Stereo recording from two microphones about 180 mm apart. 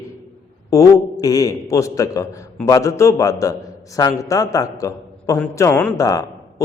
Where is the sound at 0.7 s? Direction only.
20° left (ahead or behind).